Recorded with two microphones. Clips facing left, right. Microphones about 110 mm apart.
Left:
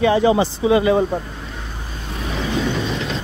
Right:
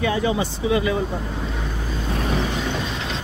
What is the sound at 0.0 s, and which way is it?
Speech, 30° left (ahead or behind).